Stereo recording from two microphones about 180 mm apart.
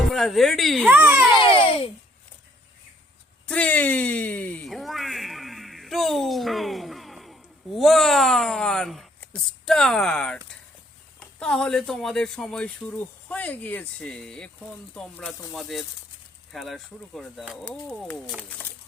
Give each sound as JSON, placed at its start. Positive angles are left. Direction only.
{"t": 0.1, "sound": "speech", "side_deg": 0}
{"t": 0.9, "sound": "a child's voice", "side_deg": -10}
{"t": 1.4, "sound": "babbling", "side_deg": 30}
{"t": 3.4, "sound": "a sound", "side_deg": 5}
{"t": 11.2, "sound": "speech", "side_deg": 5}